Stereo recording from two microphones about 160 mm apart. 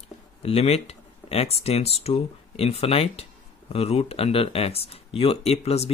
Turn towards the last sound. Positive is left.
turn(degrees=40)  # may be behind; listen again after turning